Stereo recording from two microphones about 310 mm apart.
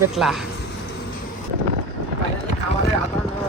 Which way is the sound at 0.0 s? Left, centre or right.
Centre.